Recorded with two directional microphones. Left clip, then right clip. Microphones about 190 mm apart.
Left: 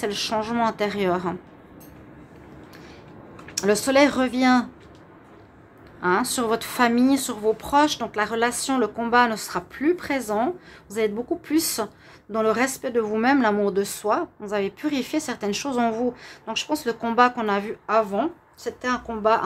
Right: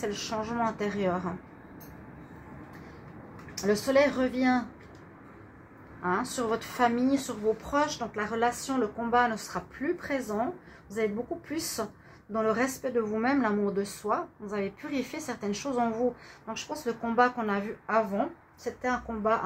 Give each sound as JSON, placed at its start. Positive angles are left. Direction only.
{"t": 0.0, "sound": "speech", "side_deg": 30}
{"t": 3.6, "sound": "speech", "side_deg": 35}
{"t": 6.0, "sound": "speech", "side_deg": 35}
{"t": 11.5, "sound": "a woman's voice", "side_deg": 30}